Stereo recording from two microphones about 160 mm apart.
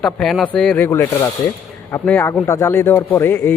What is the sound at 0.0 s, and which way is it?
Speech, centre (ahead or behind).